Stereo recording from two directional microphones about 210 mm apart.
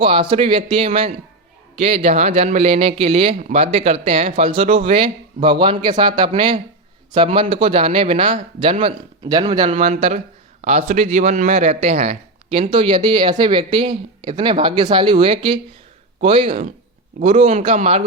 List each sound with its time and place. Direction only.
0.0 s a man's voice: 25° right (ahead or behind)
17.2 s a man's voice: 35° right (ahead or behind)